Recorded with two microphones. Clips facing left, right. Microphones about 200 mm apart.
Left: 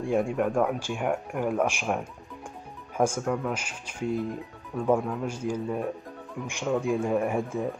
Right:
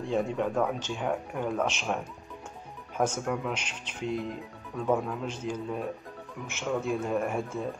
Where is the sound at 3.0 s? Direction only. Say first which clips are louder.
Left 3 dB; 5° left (ahead or behind).